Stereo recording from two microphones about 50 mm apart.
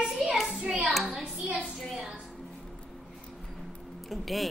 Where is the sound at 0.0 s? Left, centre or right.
Centre.